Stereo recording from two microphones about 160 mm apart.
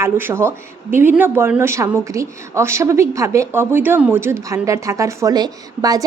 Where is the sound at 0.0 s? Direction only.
15° right (ahead or behind).